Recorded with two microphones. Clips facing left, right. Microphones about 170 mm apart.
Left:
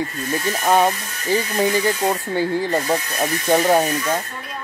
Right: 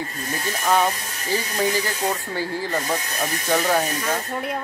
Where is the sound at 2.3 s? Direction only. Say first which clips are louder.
Left 6 dB; 20° left (ahead or behind).